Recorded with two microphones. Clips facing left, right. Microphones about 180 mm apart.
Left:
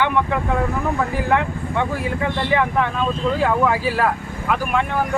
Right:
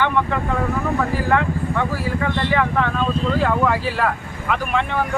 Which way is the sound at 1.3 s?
15° left (ahead or behind).